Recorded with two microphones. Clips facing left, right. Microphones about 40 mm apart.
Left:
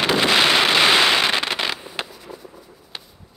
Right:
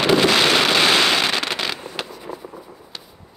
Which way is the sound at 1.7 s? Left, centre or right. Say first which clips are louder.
Even; centre.